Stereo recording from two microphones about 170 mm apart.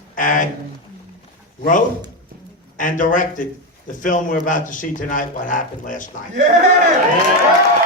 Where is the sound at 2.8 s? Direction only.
50° left (ahead or behind).